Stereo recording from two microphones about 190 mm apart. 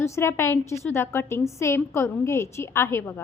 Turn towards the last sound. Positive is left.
turn(degrees=10)  # may be behind; listen again after turning